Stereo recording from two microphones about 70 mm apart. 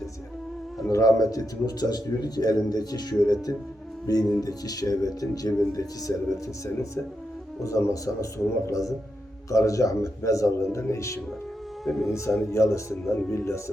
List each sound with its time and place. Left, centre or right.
0.9 s speech: left
4.0 s music: left
4.4 s speech: left
7.6 s a man's voice: left
11.9 s speech: centre
12.5 s a man's voice: left